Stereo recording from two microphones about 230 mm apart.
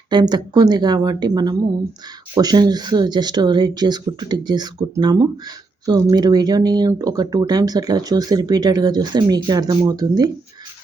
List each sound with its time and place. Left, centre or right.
0.1 s speech: centre